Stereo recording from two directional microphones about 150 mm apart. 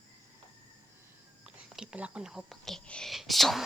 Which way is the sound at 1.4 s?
5° right (ahead or behind).